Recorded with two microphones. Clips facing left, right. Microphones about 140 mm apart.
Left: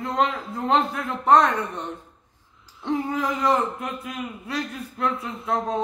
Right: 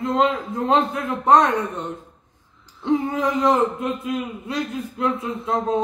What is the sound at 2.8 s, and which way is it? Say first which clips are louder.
Speech: right 4 dB; 20° right (ahead or behind).